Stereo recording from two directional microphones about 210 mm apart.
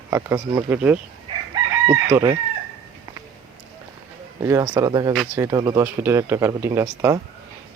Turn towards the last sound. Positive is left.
turn(degrees=-15)  # may be behind; listen again after turning